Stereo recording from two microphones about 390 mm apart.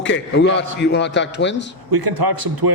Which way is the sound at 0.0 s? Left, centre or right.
Left.